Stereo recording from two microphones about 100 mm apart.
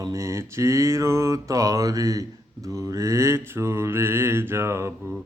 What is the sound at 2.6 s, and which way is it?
Mantra, 35° right (ahead or behind).